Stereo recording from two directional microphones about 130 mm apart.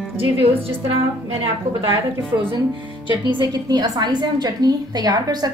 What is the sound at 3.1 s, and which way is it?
A woman's voice, 35° right (ahead or behind).